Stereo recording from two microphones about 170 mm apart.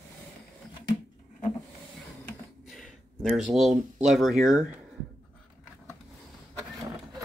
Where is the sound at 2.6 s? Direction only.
Centre (ahead or behind).